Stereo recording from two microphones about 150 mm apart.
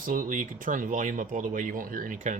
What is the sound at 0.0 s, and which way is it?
Speech, 65° right (ahead or behind).